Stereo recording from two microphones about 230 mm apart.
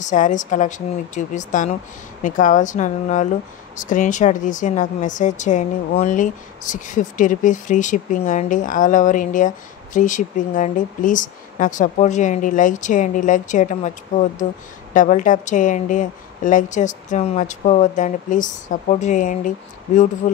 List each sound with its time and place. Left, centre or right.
0.0 s speech: left
15.0 s speech: left